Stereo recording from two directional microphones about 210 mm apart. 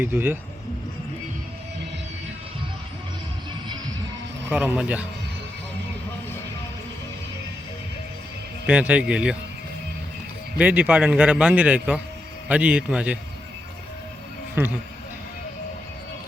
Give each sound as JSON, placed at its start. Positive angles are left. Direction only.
{"t": 0.0, "sound": "a man's voice", "side_deg": -10}
{"t": 4.4, "sound": "a man's voice", "side_deg": -10}
{"t": 8.6, "sound": "a man's voice", "side_deg": -5}
{"t": 10.6, "sound": "a man's voice", "side_deg": -5}
{"t": 14.6, "sound": "a man's voice", "side_deg": -10}